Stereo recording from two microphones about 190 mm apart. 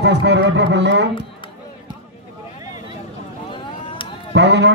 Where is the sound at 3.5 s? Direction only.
25° left (ahead or behind).